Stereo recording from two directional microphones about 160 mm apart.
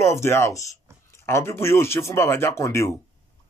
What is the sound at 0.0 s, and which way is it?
A man's voice, 15° left (ahead or behind).